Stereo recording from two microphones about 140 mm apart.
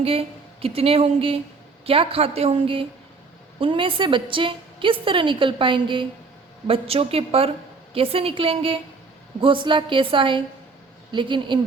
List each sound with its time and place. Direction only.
0.0 s a woman's voice: 45° right (ahead or behind)